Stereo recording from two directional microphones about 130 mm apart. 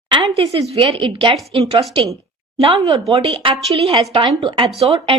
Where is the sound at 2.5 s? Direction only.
45° right (ahead or behind).